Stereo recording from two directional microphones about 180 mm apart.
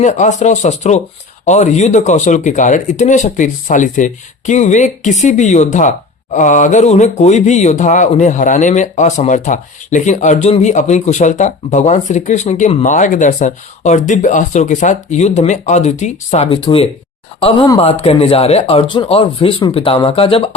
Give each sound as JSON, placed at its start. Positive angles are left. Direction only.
{"t": 0.0, "sound": "speech", "side_deg": 40}